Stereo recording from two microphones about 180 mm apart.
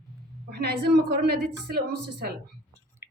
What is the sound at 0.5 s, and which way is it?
A woman's voice, 60° right (ahead or behind).